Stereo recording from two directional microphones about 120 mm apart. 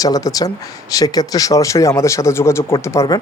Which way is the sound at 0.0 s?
30° left (ahead or behind).